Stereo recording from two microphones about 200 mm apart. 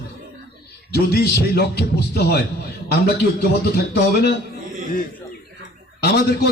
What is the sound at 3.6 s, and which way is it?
Speech, 50° left (ahead or behind).